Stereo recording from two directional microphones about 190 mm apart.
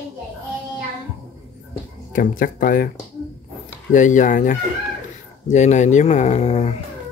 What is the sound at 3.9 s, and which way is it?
Speech, 40° left (ahead or behind).